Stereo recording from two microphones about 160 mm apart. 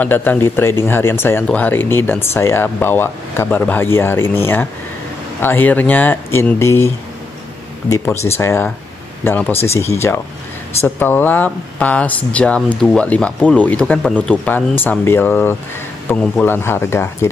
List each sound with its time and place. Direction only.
0.0 s speech: 10° left (ahead or behind)
7.9 s speech: 15° left (ahead or behind)